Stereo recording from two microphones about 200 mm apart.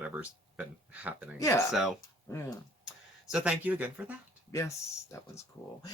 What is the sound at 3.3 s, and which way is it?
Speech, 5° right (ahead or behind).